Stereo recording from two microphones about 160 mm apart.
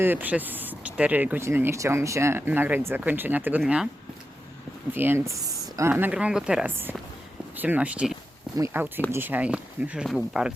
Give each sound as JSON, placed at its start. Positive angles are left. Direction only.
{"t": 0.0, "sound": "speech", "side_deg": -10}
{"t": 4.9, "sound": "speech", "side_deg": -15}